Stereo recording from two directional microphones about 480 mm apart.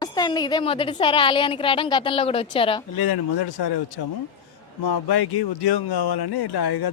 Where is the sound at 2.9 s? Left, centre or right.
Left.